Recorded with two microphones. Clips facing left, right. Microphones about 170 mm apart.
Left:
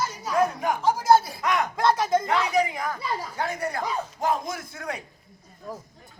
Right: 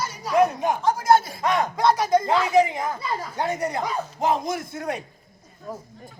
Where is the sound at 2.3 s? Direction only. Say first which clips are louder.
Right 4 dB; 25° right (ahead or behind).